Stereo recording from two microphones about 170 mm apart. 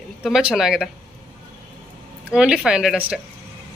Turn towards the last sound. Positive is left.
turn(degrees=-5)  # may be behind; listen again after turning